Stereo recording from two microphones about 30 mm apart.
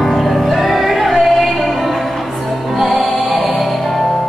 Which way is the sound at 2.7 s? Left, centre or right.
Centre.